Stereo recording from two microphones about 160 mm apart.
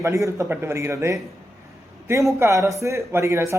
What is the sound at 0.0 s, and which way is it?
A man's voice, 20° right (ahead or behind).